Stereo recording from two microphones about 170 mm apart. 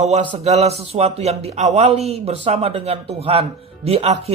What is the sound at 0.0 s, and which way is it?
Speech, 40° right (ahead or behind).